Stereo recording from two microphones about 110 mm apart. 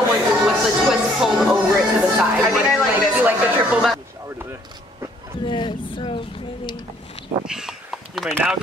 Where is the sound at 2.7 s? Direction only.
Centre (ahead or behind).